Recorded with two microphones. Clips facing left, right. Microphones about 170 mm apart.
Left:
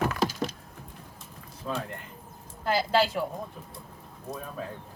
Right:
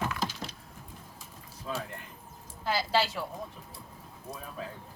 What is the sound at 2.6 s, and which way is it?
Speech, 50° left (ahead or behind).